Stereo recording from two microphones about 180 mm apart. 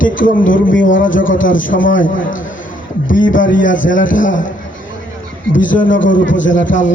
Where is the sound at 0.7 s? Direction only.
90° left.